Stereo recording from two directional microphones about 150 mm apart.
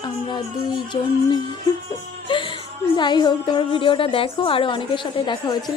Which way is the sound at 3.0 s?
30° left (ahead or behind).